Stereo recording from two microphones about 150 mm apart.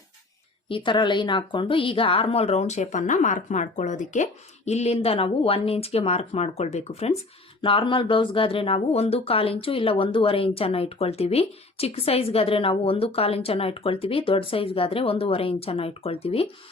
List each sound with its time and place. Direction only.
0.7 s speech: 30° left (ahead or behind)